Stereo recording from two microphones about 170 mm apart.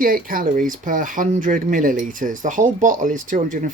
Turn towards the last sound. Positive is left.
turn(degrees=-50)  # may be behind; listen again after turning